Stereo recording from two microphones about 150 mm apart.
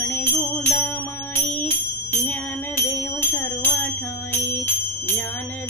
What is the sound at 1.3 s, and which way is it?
Bell, 15° left (ahead or behind).